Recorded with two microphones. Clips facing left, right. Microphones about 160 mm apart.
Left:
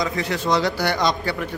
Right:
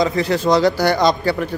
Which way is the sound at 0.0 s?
35° right (ahead or behind).